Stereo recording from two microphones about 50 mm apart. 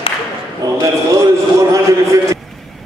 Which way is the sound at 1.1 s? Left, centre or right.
Right.